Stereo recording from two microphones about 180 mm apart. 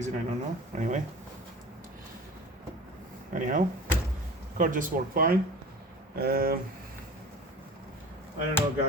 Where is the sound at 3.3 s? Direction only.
45° right (ahead or behind).